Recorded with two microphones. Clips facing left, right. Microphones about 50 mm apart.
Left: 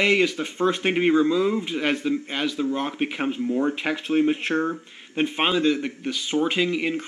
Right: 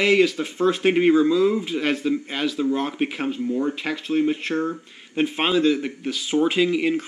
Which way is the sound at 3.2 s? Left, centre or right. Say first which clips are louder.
Even; centre.